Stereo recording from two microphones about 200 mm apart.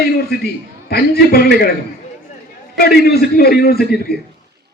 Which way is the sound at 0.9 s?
50° left (ahead or behind).